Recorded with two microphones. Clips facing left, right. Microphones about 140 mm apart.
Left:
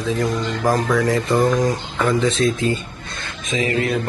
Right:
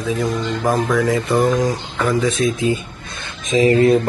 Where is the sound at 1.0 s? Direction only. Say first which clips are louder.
Right 1 dB; 15° right (ahead or behind).